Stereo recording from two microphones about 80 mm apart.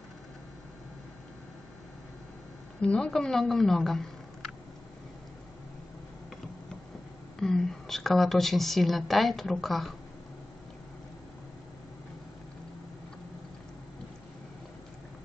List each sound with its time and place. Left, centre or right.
2.8 s a woman's voice: centre
7.3 s a woman's voice: centre